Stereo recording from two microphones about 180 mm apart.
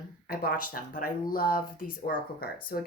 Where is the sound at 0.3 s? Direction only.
50° left (ahead or behind).